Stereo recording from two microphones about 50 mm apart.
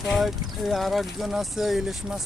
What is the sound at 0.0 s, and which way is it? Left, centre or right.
Speech, centre.